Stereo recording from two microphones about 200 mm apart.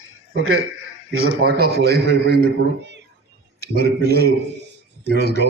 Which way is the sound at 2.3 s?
55° right (ahead or behind).